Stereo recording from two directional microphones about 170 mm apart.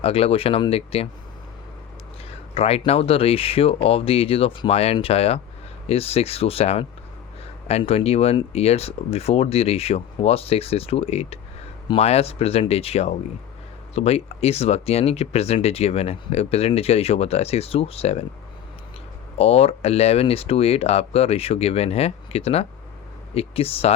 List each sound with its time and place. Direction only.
0.0 s speech: 35° left (ahead or behind)
2.6 s speech: 35° left (ahead or behind)
19.4 s speech: 35° left (ahead or behind)